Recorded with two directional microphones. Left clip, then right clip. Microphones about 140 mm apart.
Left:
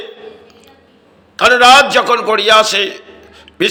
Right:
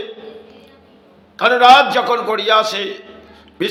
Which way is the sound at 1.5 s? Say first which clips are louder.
Left 2 dB; 15° left (ahead or behind).